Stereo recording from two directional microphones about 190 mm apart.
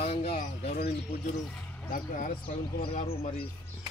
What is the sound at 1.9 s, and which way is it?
Speech, 45° left (ahead or behind).